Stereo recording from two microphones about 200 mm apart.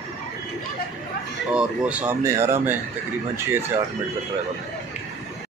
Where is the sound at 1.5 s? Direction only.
5° right (ahead or behind).